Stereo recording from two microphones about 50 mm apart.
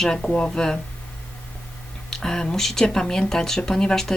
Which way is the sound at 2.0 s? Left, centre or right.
Centre.